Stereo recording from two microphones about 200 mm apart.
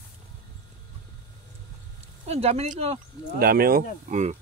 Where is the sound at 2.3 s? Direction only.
30° right (ahead or behind).